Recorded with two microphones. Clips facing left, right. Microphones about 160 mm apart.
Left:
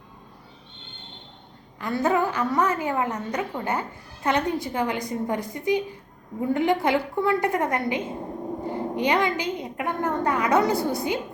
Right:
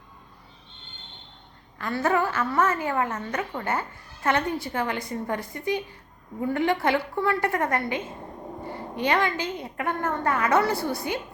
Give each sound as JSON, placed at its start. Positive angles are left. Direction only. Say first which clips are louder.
{"t": 1.8, "sound": "a woman's voice", "louder": "left 1 dB", "side_deg": 15}